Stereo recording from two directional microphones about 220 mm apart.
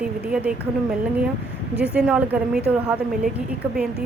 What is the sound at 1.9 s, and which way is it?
Speech, 5° right (ahead or behind).